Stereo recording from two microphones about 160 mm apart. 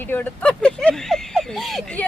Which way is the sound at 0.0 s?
10° left (ahead or behind).